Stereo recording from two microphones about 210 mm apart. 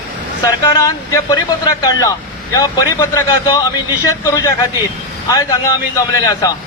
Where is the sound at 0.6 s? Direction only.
15° left (ahead or behind).